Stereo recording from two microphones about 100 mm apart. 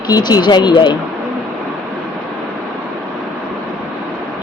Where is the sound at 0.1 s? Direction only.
40° left (ahead or behind).